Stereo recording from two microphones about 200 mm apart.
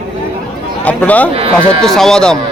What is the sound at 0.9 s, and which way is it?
A man's voice, 5° left (ahead or behind).